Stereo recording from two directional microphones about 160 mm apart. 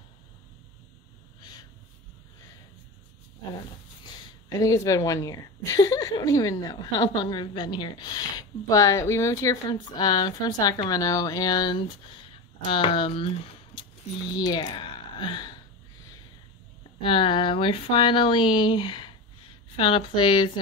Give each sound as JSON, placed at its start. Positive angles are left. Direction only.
{"t": 1.4, "sound": "a sound", "side_deg": 25}
{"t": 4.5, "sound": "a woman's voice", "side_deg": 20}
{"t": 14.3, "sound": "speech", "side_deg": 25}
{"t": 17.0, "sound": "speech", "side_deg": 35}